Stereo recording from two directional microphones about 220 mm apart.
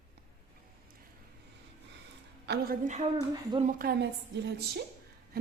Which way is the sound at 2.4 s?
40° right (ahead or behind).